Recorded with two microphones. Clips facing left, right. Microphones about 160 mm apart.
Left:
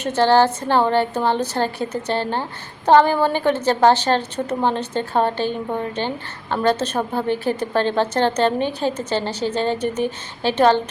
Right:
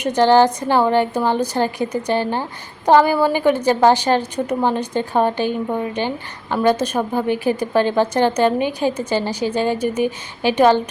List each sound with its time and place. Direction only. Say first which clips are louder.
0.0 s a woman's voice: right 2 dB; 15° right (ahead or behind)